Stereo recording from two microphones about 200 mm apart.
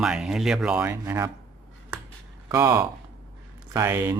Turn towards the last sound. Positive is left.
turn(degrees=-10)  # may be behind; listen again after turning